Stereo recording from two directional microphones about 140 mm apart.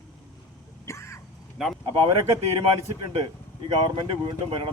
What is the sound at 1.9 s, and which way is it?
Speech, 40° right (ahead or behind).